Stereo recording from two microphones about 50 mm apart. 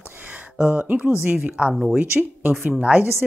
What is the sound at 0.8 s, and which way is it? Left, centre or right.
Speech, right.